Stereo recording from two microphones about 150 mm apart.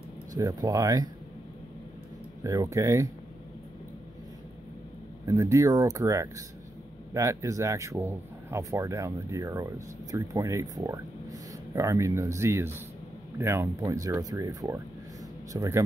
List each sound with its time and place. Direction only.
0.4 s speech: 25° right (ahead or behind)
2.4 s speech: 20° right (ahead or behind)
5.2 s speech: 20° right (ahead or behind)